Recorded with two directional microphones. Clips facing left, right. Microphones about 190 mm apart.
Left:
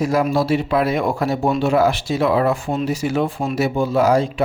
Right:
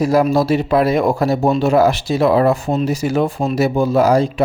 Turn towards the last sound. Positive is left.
turn(degrees=-40)  # may be behind; listen again after turning